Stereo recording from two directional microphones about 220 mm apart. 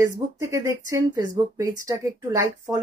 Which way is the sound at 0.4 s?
15° right (ahead or behind).